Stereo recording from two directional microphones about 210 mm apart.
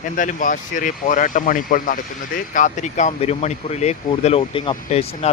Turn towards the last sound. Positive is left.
turn(degrees=30)  # may be behind; listen again after turning